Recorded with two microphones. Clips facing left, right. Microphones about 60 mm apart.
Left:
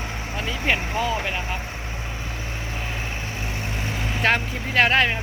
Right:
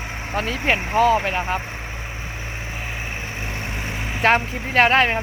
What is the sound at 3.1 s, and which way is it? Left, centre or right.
Vehicle, right.